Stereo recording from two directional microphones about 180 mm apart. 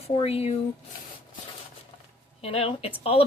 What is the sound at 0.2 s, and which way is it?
Speech, 35° left (ahead or behind).